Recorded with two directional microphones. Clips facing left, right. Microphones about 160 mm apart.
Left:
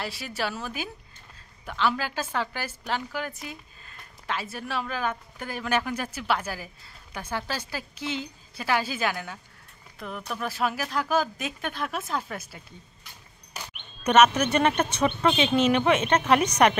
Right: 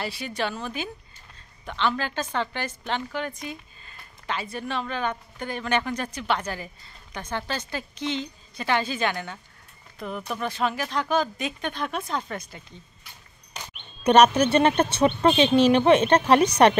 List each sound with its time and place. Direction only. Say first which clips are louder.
0.0 s a woman's voice: right 2 dB; centre (ahead or behind)
13.5 s a sound: even; 5° left (ahead or behind)
14.0 s a woman's voice: right 3 dB; 35° right (ahead or behind)